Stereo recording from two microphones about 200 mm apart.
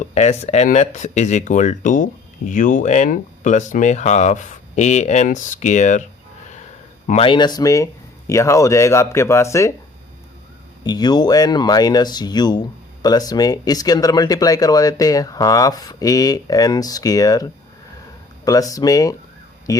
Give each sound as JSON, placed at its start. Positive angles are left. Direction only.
{"t": 0.1, "sound": "speech", "side_deg": 35}
{"t": 7.1, "sound": "speech", "side_deg": 25}
{"t": 10.8, "sound": "speech", "side_deg": 20}